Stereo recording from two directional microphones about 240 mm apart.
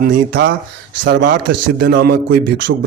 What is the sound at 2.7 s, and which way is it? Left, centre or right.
Speech, right.